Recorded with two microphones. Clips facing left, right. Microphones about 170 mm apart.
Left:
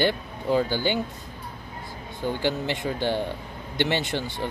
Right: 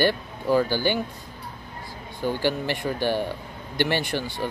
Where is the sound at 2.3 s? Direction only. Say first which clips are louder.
Right 1 dB; 20° left (ahead or behind).